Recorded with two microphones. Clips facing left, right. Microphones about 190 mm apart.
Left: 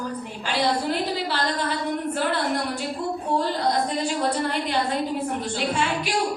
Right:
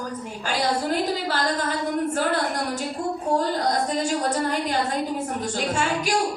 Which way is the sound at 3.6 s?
45° right (ahead or behind).